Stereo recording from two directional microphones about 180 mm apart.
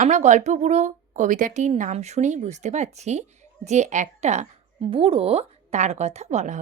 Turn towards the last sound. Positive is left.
turn(degrees=-40)  # may be behind; listen again after turning